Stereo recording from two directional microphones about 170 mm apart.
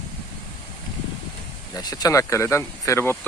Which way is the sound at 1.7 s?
20° left (ahead or behind).